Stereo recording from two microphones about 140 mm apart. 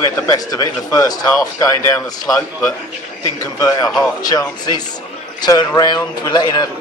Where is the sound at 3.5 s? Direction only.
25° left (ahead or behind).